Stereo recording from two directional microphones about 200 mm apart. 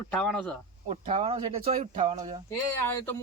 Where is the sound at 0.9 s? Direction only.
30° right (ahead or behind).